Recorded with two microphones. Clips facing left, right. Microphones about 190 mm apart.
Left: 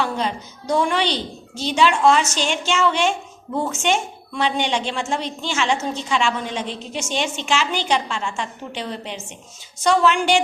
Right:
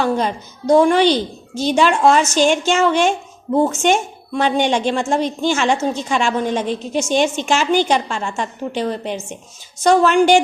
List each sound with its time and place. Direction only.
0.0 s a woman's voice: 45° right (ahead or behind)